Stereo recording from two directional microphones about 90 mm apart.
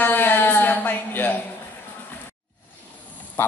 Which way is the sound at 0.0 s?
20° left (ahead or behind).